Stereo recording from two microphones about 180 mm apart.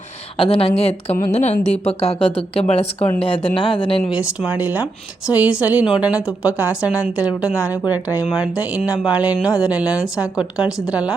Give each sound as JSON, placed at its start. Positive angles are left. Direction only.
{"t": 0.3, "sound": "speech", "side_deg": 30}
{"t": 4.0, "sound": "speech", "side_deg": -5}